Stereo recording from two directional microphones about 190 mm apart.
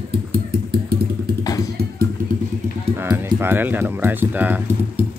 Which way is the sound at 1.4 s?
20° left (ahead or behind).